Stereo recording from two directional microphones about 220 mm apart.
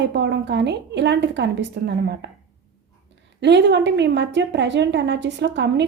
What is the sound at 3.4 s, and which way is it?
A woman's voice, 50° right (ahead or behind).